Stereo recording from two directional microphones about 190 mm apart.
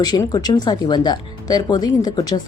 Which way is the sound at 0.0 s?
20° left (ahead or behind).